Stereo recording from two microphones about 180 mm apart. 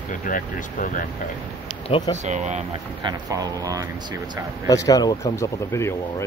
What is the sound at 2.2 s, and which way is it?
Speech, 40° right (ahead or behind).